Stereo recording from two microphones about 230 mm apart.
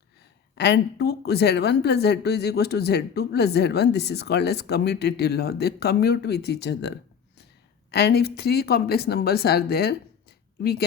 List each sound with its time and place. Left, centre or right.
0.5 s a woman's voice: left